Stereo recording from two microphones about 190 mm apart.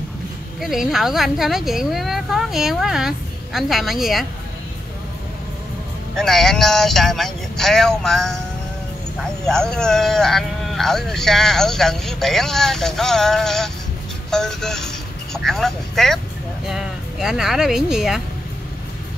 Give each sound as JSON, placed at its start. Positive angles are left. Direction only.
{"t": 0.6, "sound": "speech", "side_deg": 0}
{"t": 6.1, "sound": "speech", "side_deg": 0}
{"t": 9.4, "sound": "speech", "side_deg": 5}